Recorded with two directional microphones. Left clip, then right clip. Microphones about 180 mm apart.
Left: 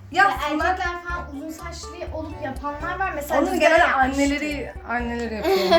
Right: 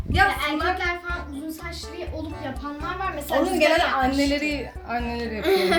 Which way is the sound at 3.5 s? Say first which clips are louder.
Left 4 dB; 45° right (ahead or behind).